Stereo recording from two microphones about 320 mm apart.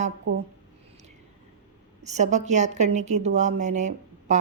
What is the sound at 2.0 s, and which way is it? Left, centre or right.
A woman's voice, right.